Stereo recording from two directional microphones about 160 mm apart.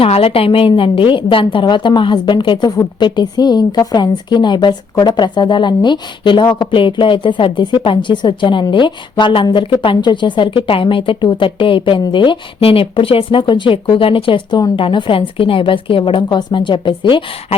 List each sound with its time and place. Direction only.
0.0 s a woman's voice: 40° left (ahead or behind)